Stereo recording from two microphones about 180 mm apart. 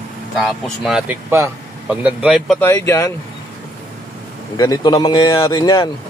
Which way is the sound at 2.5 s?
15° left (ahead or behind).